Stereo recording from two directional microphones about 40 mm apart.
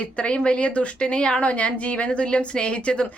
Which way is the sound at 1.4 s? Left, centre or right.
Left.